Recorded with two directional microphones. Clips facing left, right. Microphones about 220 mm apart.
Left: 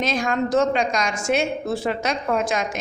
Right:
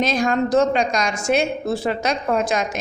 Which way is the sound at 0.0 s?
35° right (ahead or behind).